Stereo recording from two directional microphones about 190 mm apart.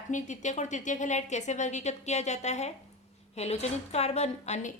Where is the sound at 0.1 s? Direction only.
40° left (ahead or behind).